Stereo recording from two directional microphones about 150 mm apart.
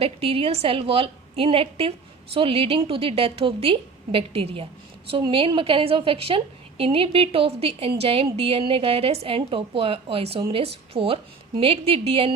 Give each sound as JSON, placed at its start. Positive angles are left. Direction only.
{"t": 0.0, "sound": "a woman's voice", "side_deg": -40}